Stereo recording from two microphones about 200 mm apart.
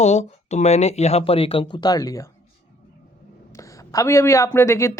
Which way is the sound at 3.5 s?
15° left (ahead or behind).